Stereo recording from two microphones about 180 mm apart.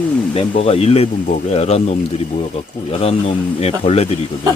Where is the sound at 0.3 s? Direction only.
35° left (ahead or behind).